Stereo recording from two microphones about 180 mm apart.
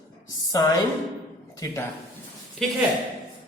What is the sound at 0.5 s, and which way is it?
Speech, 20° left (ahead or behind).